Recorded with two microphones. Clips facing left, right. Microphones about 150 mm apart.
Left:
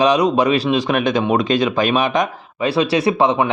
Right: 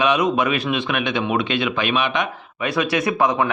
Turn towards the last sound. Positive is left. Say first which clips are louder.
# left 4 dB
turn(degrees=30)  # may be behind; listen again after turning